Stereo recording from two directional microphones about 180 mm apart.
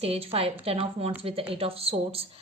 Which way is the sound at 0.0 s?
30° right (ahead or behind).